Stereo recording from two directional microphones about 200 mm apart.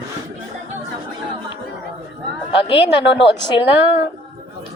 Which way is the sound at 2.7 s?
25° left (ahead or behind).